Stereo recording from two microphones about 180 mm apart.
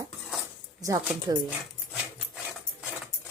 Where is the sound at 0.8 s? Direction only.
20° right (ahead or behind).